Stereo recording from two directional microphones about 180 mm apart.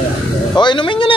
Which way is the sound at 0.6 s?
25° left (ahead or behind).